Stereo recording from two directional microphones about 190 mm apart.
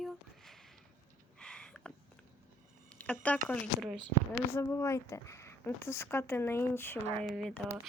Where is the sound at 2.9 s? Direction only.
5° left (ahead or behind).